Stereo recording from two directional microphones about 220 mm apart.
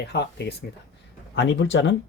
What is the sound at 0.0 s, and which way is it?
Speech, 50° left (ahead or behind).